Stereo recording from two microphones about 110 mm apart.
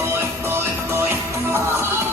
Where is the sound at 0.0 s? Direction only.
20° right (ahead or behind).